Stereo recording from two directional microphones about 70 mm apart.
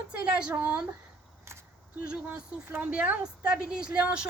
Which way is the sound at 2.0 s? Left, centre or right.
Centre.